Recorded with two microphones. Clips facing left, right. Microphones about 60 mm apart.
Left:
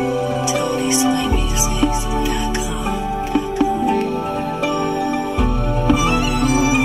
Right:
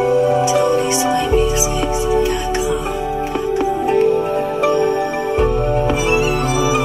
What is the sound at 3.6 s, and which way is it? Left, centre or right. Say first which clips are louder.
Music: right 3 dB; right.